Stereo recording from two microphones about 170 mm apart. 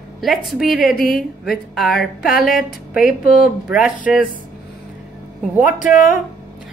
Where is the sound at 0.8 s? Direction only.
55° left (ahead or behind).